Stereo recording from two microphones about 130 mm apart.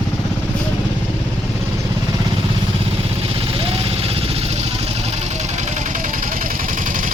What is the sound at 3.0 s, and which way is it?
Vehicle, 45° right (ahead or behind).